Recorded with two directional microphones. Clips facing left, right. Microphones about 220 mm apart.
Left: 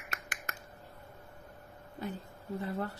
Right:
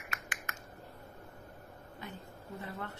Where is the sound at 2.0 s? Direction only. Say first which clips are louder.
Left 7 dB; 35° left (ahead or behind).